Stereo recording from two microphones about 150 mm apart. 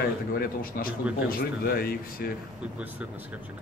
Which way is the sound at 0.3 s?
75° left (ahead or behind).